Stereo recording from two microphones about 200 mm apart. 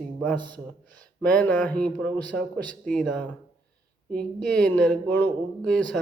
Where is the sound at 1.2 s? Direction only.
5° left (ahead or behind).